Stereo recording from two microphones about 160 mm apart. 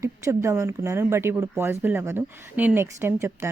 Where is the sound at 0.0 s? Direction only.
15° right (ahead or behind).